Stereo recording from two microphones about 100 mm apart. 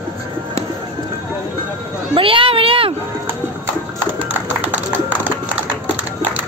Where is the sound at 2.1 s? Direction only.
65° right (ahead or behind).